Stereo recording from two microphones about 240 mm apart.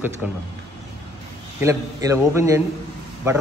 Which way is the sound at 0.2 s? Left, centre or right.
Centre.